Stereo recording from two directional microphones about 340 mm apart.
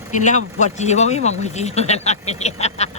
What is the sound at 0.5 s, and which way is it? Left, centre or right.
Speech, centre.